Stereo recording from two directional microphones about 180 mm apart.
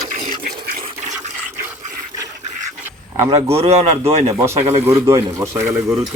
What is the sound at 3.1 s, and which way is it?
A man's voice, 25° right (ahead or behind).